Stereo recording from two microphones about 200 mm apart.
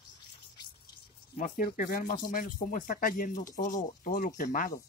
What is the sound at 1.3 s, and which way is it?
Speech, 40° left (ahead or behind).